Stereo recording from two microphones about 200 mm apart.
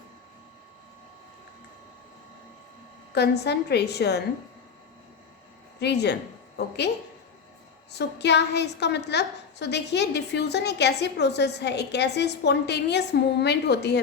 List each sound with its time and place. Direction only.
3.2 s a woman's voice: 55° left (ahead or behind)
5.8 s a woman's voice: 55° left (ahead or behind)
7.9 s a woman's voice: 55° left (ahead or behind)